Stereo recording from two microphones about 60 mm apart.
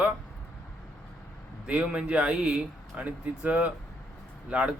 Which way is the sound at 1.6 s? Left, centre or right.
Centre.